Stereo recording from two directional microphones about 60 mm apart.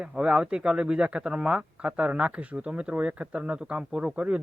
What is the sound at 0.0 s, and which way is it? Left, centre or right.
Speech, centre.